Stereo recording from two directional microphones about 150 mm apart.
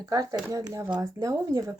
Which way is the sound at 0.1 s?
25° right (ahead or behind).